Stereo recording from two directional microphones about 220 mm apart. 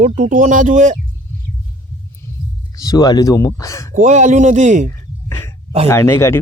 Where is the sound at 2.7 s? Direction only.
15° left (ahead or behind).